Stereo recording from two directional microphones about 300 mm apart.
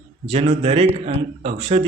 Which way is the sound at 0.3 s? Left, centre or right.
Right.